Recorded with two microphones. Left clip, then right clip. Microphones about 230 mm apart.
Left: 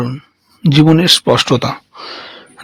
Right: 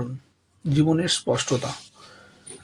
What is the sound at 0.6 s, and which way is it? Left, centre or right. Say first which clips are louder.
Speech: left 12 dB; left.